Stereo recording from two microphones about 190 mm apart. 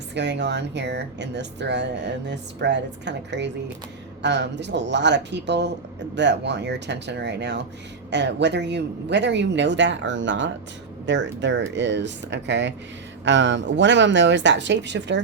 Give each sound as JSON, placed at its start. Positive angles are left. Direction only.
{"t": 0.1, "sound": "speech", "side_deg": -65}